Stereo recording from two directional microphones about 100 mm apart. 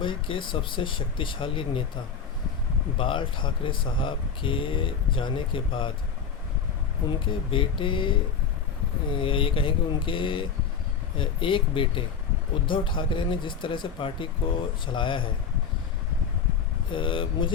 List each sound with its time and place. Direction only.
0.0 s speech: 55° left (ahead or behind)
3.0 s speech: 55° left (ahead or behind)
7.5 s speech: 60° left (ahead or behind)
16.9 s speech: 55° left (ahead or behind)